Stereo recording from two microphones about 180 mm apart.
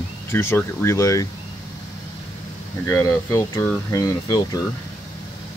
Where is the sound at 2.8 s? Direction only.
15° left (ahead or behind).